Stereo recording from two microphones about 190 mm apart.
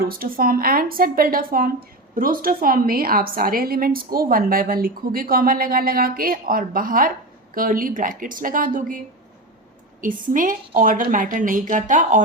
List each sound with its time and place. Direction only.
0.0 s a woman's voice: 50° right (ahead or behind)
10.0 s a woman's voice: 45° right (ahead or behind)